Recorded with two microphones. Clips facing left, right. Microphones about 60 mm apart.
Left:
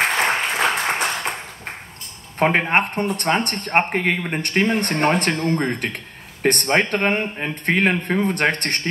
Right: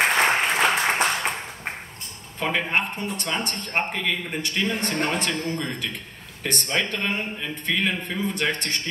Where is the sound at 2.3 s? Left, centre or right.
Left.